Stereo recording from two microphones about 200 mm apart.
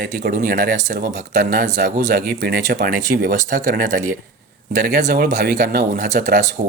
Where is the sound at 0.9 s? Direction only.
50° right (ahead or behind).